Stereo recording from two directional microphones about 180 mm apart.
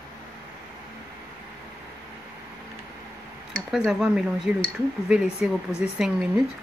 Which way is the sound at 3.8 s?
5° right (ahead or behind).